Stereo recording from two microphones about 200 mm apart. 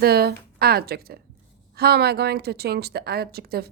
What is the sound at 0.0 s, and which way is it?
A woman's voice, 50° right (ahead or behind).